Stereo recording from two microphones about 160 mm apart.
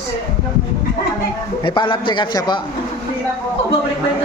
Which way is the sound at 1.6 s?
30° left (ahead or behind).